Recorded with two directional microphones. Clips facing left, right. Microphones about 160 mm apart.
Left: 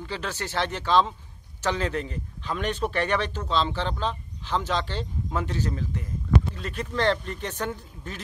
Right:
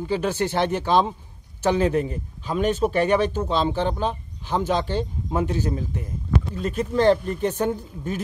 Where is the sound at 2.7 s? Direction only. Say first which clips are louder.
Right 7 dB; 45° right (ahead or behind).